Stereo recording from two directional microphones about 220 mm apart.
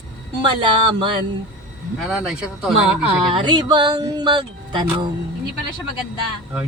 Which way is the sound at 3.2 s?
20° right (ahead or behind).